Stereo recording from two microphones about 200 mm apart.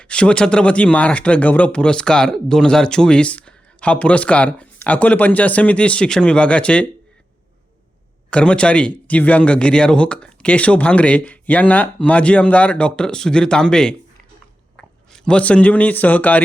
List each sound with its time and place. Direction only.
0.0 s speech: 5° left (ahead or behind)
8.3 s speech: 5° left (ahead or behind)